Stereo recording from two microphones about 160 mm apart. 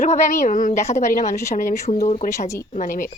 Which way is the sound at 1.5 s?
55° left (ahead or behind).